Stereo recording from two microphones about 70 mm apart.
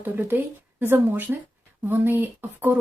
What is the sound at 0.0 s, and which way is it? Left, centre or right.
A woman's voice, right.